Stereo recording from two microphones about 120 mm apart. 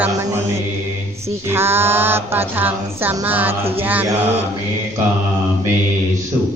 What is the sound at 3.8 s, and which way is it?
Mantra, 15° right (ahead or behind).